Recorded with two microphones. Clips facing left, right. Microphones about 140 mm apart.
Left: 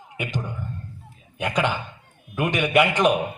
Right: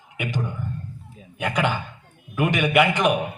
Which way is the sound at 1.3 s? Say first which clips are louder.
Even; 20° left (ahead or behind).